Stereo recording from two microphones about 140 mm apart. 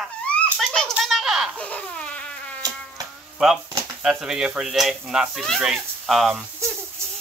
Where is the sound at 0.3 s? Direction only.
5° left (ahead or behind).